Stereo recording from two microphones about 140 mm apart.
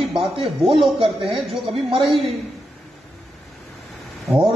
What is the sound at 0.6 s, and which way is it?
A man's voice, 45° right (ahead or behind).